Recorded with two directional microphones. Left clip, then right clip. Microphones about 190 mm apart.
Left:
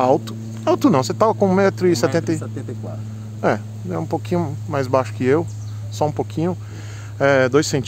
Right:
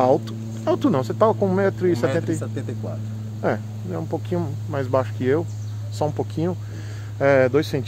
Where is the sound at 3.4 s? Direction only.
40° left (ahead or behind).